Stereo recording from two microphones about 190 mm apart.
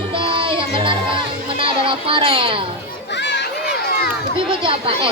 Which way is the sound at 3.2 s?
65° left (ahead or behind).